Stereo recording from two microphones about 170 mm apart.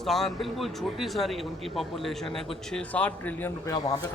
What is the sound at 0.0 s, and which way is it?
A man's voice, centre (ahead or behind).